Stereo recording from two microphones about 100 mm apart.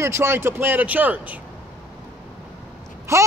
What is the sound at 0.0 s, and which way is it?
A man's voice, 25° right (ahead or behind).